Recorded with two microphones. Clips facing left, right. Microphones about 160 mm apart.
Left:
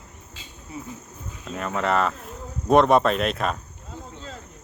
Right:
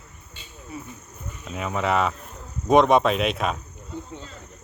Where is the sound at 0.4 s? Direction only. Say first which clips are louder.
Left 1 dB; 90° left.